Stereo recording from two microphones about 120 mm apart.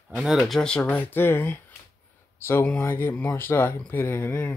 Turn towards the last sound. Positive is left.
turn(degrees=15)  # may be behind; listen again after turning